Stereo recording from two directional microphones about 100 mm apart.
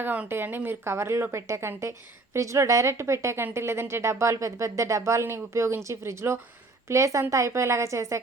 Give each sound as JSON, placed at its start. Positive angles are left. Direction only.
{"t": 0.0, "sound": "a woman's voice", "side_deg": -15}